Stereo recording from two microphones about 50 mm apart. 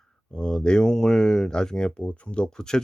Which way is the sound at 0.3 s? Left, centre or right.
Centre.